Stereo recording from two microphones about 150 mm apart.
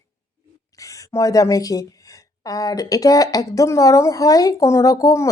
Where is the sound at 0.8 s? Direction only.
20° left (ahead or behind).